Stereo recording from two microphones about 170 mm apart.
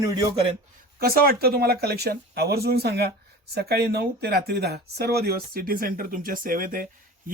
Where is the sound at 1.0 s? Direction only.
60° right (ahead or behind).